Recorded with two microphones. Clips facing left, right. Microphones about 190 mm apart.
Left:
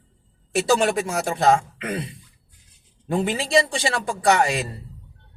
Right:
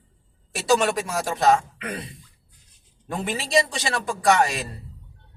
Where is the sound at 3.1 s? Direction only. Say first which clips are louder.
Left 5 dB; 30° left (ahead or behind).